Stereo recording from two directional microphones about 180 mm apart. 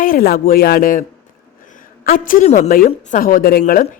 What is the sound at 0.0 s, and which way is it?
A woman's voice, 55° left (ahead or behind).